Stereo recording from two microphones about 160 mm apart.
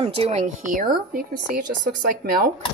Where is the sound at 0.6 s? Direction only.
55° right (ahead or behind).